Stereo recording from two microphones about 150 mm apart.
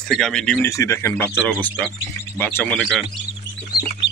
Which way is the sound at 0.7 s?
20° left (ahead or behind).